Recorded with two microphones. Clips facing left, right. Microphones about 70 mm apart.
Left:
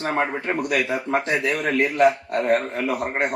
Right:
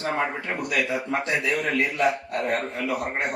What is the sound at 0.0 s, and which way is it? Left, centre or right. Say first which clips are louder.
A man's voice: left 3 dB; left.